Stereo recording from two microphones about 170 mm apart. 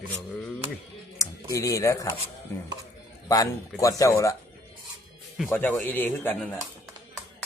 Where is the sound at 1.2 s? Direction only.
20° left (ahead or behind).